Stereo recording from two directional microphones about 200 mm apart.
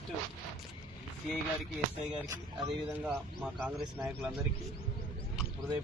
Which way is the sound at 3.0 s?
5° right (ahead or behind).